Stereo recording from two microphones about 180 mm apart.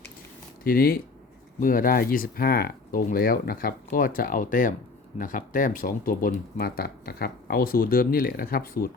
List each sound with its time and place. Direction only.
0.6 s speech: 55° left (ahead or behind)